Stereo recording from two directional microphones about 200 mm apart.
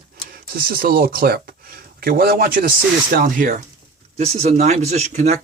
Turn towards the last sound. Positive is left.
turn(degrees=-35)  # may be behind; listen again after turning